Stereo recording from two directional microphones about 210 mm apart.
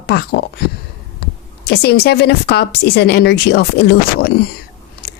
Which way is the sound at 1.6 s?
50° left (ahead or behind).